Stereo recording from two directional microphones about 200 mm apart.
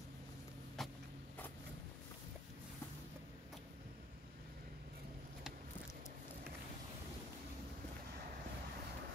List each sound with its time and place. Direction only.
0.8 s vehicle: centre (ahead or behind)